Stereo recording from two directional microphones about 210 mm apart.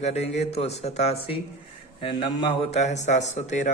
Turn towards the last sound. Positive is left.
turn(degrees=35)  # may be behind; listen again after turning